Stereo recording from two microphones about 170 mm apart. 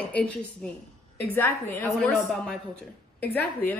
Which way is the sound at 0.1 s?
5° left (ahead or behind).